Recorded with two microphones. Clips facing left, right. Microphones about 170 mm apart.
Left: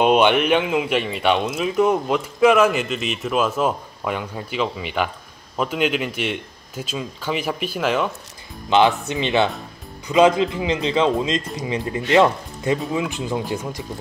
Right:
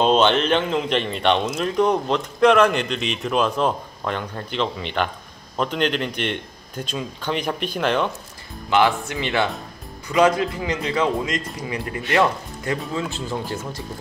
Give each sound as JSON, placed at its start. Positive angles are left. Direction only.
{"t": 0.0, "sound": "speech", "side_deg": 10}
{"t": 8.6, "sound": "speech", "side_deg": 20}